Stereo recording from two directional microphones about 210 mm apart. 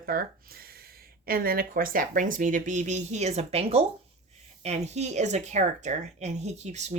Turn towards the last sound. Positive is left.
turn(degrees=-30)  # may be behind; listen again after turning